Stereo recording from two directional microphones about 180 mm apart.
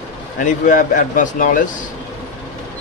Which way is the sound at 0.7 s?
50° left (ahead or behind).